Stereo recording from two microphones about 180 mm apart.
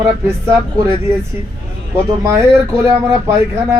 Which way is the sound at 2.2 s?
15° right (ahead or behind).